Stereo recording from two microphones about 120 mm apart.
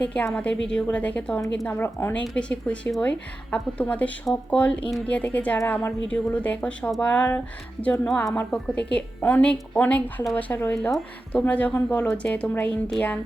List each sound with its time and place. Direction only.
0.0 s speech: 10° left (ahead or behind)